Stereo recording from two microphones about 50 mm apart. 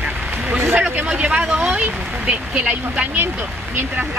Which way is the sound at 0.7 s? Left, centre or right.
Right.